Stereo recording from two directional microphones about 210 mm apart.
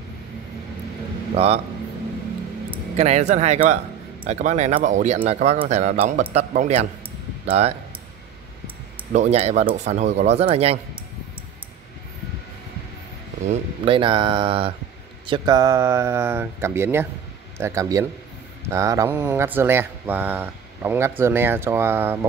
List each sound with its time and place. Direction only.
1.3 s a man's voice: 30° right (ahead or behind)
3.0 s speech: 30° right (ahead or behind)
9.1 s speech: 30° right (ahead or behind)
13.5 s speech: 25° right (ahead or behind); by 22.2 s 10° right (ahead or behind)